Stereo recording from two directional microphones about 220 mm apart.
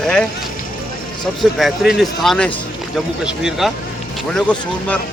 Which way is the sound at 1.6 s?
Centre (ahead or behind).